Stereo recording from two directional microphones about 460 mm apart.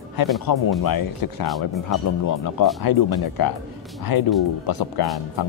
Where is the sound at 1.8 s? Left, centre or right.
Left.